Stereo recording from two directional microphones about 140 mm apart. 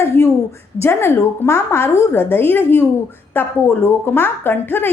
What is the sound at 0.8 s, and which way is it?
A woman's voice, 15° left (ahead or behind).